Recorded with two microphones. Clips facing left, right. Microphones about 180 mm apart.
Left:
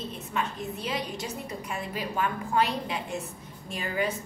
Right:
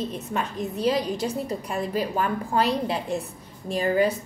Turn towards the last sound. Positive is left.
turn(degrees=-35)  # may be behind; listen again after turning